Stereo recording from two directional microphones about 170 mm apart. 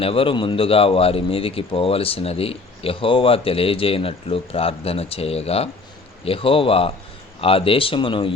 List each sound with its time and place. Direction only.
0.0 s a man's voice: 35° left (ahead or behind)